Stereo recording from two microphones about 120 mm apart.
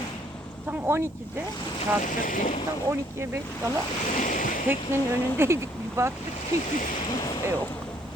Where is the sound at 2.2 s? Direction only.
90° left.